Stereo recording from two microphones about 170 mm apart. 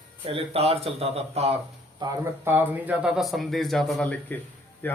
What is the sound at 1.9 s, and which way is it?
A man's voice, 15° right (ahead or behind).